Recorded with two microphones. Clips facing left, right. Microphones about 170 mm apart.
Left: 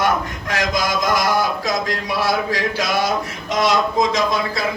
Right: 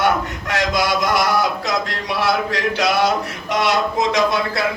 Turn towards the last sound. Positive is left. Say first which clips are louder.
# right 2 dB
turn(degrees=-70)  # may be behind; listen again after turning